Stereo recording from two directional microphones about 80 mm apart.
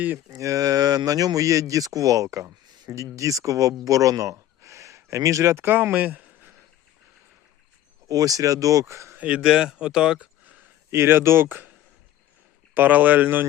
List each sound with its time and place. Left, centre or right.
0.3 s speech: right
8.0 s speech: right
9.1 s speech: centre
10.9 s speech: right
12.7 s speech: right